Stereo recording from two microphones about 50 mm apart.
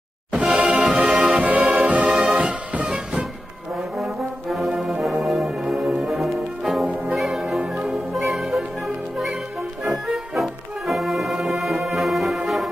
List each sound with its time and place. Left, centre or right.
0.5 s music: right
4.0 s brass instrument: centre
5.2 s music: centre